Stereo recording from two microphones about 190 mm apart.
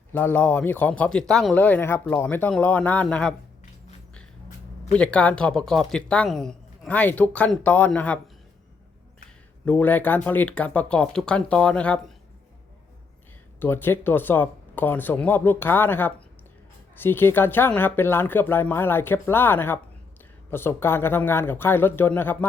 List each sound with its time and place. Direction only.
0.1 s speech: 10° left (ahead or behind)
4.9 s speech: 5° left (ahead or behind)
9.6 s speech: 10° left (ahead or behind)
13.6 s speech: 10° left (ahead or behind)